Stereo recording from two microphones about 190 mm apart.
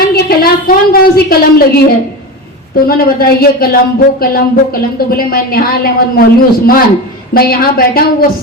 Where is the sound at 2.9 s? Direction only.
50° left (ahead or behind).